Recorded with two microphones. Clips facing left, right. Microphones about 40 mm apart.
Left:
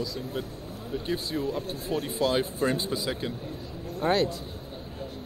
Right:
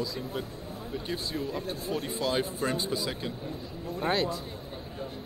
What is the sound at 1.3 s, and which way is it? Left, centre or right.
Speech, left.